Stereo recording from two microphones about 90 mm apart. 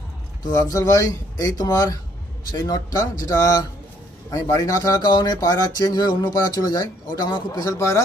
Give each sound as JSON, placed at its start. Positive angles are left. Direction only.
{"t": 0.4, "sound": "speech", "side_deg": 40}
{"t": 7.6, "sound": "speech", "side_deg": 40}